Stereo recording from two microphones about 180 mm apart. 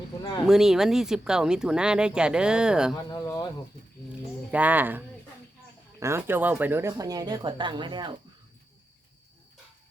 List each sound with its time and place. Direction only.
0.4 s speech: centre (ahead or behind)
2.9 s speech: 25° left (ahead or behind)
4.5 s speech: 10° right (ahead or behind); by 8.2 s 25° right (ahead or behind)